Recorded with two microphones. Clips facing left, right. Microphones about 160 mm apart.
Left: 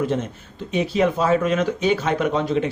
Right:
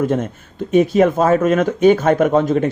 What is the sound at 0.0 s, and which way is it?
Speech, 50° right (ahead or behind).